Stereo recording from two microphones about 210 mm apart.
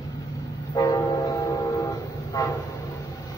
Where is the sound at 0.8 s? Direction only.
15° left (ahead or behind).